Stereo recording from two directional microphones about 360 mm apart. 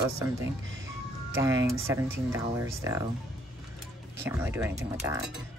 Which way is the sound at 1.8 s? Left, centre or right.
Centre.